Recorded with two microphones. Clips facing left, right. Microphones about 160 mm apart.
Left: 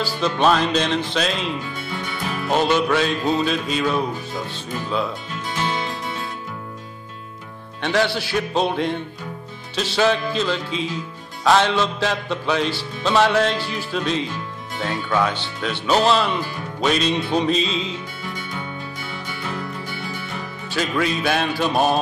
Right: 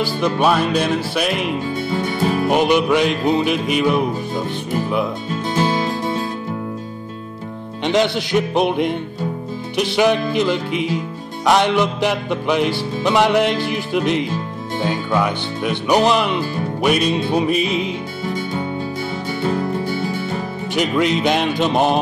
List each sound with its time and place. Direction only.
0.0 s music: 15° right (ahead or behind)
1.8 s music: 35° right (ahead or behind)
2.4 s music: 15° right (ahead or behind)
5.5 s music: 30° right (ahead or behind)
7.8 s music: 20° right (ahead or behind)
19.4 s music: 30° right (ahead or behind)
20.7 s music: 20° right (ahead or behind)